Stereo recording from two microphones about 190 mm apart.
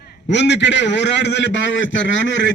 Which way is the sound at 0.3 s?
65° left (ahead or behind).